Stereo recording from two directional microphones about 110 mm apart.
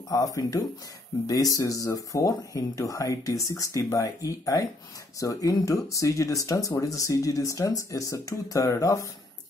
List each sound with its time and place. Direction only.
0.1 s speech: 30° left (ahead or behind)